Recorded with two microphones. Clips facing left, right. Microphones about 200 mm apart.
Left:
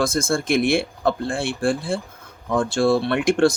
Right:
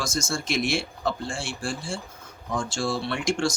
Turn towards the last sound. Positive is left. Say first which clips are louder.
# left 8 dB
turn(degrees=60)  # may be behind; listen again after turning